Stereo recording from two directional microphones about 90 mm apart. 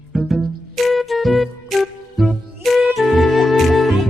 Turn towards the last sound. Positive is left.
turn(degrees=0)  # may be behind; listen again after turning